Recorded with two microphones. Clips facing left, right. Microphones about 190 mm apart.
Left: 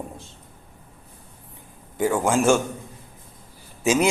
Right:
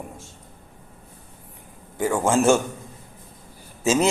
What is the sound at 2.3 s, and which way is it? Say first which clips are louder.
Speech: right 2 dB; 10° left (ahead or behind).